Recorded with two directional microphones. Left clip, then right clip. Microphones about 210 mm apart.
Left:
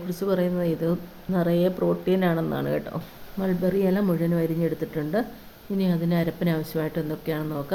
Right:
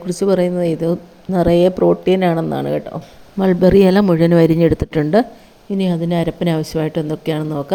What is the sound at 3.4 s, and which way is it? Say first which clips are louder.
A woman's voice: right 13 dB; 40° right (ahead or behind).